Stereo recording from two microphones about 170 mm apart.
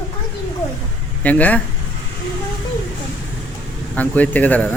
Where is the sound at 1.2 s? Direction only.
10° left (ahead or behind).